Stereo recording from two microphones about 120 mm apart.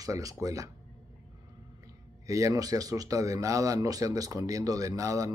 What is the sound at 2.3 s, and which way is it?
Speech, 30° right (ahead or behind).